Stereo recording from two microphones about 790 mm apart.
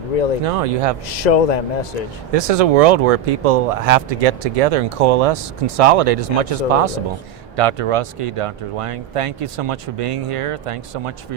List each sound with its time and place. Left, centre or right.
0.4 s speech: right
1.1 s a man's voice: left
2.3 s speech: right